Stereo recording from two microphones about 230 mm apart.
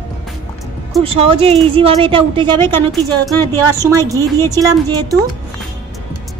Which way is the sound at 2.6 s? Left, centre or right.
Centre.